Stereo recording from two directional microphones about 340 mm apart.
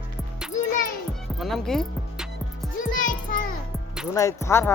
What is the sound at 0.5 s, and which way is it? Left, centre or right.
Music, left.